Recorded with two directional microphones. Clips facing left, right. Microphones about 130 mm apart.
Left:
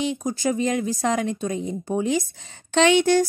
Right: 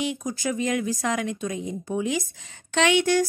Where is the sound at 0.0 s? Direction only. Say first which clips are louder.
Left 4 dB; 25° left (ahead or behind).